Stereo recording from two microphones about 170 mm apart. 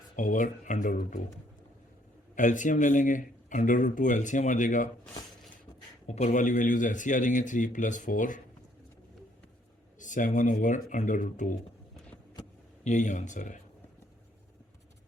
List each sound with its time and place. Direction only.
0.2 s speech: 50° left (ahead or behind)
2.3 s speech: 50° left (ahead or behind)
6.1 s speech: 45° left (ahead or behind)
10.0 s speech: 50° left (ahead or behind)
12.8 s speech: 45° left (ahead or behind)